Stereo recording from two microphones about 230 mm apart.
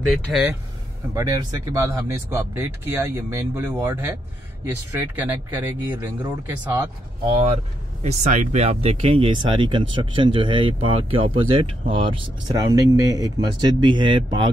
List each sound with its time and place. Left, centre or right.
0.1 s speech: centre
1.1 s speech: centre
7.2 s speech: right